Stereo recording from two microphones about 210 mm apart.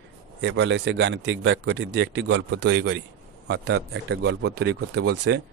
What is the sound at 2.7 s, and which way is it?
A man's voice, 55° right (ahead or behind).